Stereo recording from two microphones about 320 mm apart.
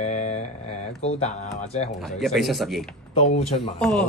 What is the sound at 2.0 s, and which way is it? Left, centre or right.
Speech, centre.